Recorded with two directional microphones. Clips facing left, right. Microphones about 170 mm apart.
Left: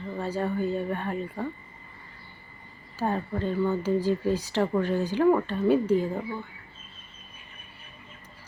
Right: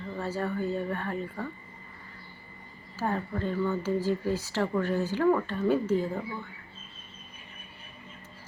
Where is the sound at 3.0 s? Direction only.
20° left (ahead or behind).